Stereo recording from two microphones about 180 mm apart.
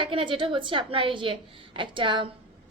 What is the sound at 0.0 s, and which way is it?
A woman's voice, 30° right (ahead or behind).